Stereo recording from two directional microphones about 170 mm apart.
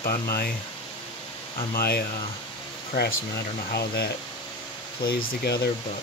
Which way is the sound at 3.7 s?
65° left (ahead or behind).